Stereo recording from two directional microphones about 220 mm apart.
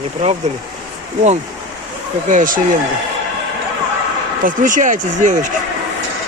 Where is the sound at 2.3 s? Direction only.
35° right (ahead or behind).